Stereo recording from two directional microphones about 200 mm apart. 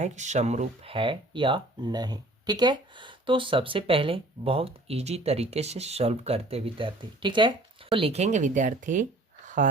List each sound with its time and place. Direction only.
0.0 s speech: 35° right (ahead or behind)